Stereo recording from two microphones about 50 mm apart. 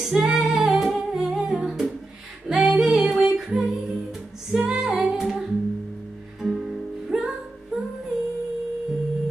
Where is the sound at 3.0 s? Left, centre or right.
Right.